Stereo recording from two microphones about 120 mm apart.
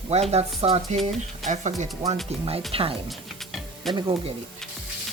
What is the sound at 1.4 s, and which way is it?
Speech, 80° right.